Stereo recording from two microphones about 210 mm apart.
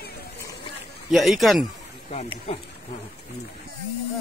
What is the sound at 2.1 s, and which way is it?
Speech, 30° left (ahead or behind).